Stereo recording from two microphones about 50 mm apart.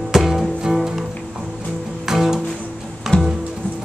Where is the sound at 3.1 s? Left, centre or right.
Left.